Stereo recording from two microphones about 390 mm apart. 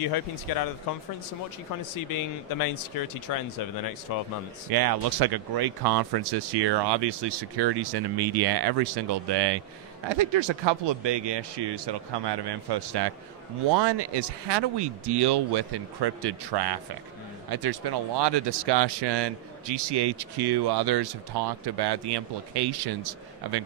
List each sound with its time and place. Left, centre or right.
0.1 s speech: left
2.0 s a man's voice: left
4.6 s speech: right